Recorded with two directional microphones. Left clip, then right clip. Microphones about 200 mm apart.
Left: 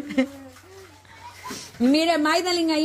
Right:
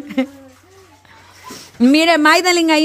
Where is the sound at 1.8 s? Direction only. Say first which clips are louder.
Right 8 dB; 30° right (ahead or behind).